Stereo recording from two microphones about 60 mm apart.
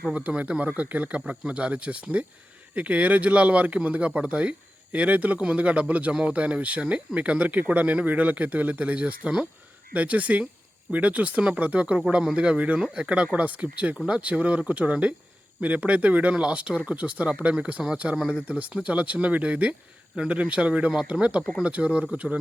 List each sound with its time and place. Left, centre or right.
0.1 s speech: right